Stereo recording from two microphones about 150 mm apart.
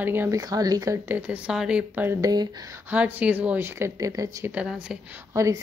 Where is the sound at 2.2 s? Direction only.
25° right (ahead or behind).